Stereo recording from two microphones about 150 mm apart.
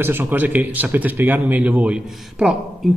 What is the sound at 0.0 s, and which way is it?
A man's voice, 15° right (ahead or behind).